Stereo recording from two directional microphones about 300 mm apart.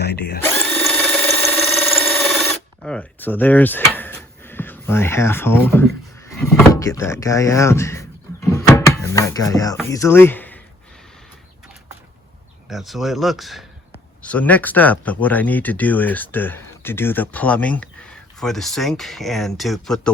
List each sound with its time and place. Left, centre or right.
0.0 s drill: left
0.4 s drill: centre
6.3 s speech: centre
8.5 s music: centre
9.7 s speech: centre
12.6 s speech: centre